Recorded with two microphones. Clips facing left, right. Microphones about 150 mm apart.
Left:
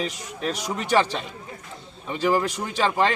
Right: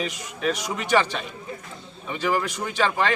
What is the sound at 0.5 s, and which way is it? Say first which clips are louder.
A man's voice: left 1 dB; 35° left (ahead or behind).